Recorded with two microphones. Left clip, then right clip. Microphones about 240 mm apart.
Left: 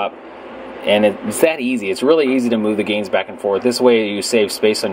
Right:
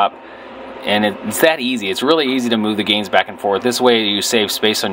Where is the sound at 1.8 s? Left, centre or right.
Right.